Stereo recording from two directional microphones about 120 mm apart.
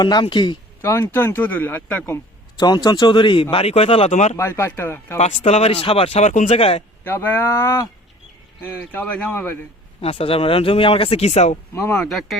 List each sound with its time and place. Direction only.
0.0 s speech: 40° left (ahead or behind)
0.8 s speech: 25° left (ahead or behind)
2.6 s speech: 35° left (ahead or behind)
3.5 s speech: 55° left (ahead or behind)
4.1 s speech: 70° left (ahead or behind)
4.4 s speech: 20° left (ahead or behind)
5.1 s speech: 65° left (ahead or behind)
6.2 s speech: 85° left; by 6.8 s 60° left (ahead or behind)
7.0 s speech: 15° left (ahead or behind)
10.0 s speech: 55° left (ahead or behind)
11.8 s speech: 10° left (ahead or behind)